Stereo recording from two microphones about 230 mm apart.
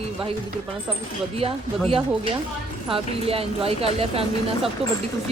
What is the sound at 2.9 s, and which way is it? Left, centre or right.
Speech, right.